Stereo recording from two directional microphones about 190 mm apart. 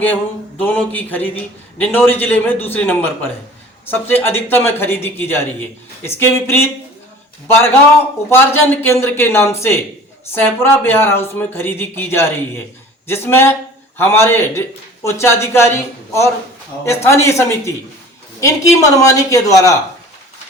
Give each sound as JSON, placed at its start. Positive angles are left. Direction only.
{"t": 0.6, "sound": "speech", "side_deg": 10}